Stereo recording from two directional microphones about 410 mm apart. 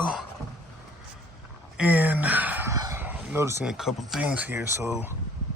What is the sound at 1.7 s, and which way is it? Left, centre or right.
Speech, centre.